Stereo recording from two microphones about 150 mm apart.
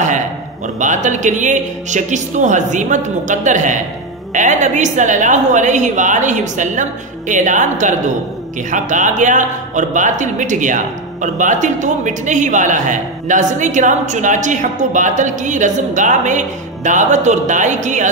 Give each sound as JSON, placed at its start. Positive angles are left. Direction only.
{"t": 0.7, "sound": "a man's voice", "side_deg": -55}